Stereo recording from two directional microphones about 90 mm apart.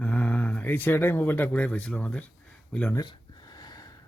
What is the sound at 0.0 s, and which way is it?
Speech, 15° left (ahead or behind).